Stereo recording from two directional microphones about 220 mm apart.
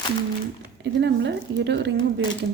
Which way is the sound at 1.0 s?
55° right (ahead or behind).